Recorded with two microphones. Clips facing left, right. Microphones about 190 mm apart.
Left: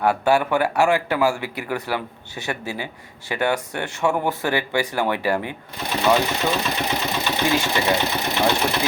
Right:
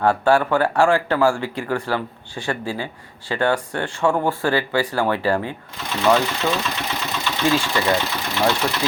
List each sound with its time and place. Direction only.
0.0 s speech: 10° left (ahead or behind)
4.4 s speech: 20° left (ahead or behind)